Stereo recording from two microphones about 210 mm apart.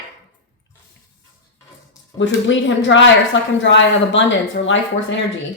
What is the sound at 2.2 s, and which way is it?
Speech, 60° left (ahead or behind).